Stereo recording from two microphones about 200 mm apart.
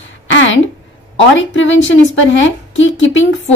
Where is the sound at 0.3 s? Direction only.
65° left (ahead or behind).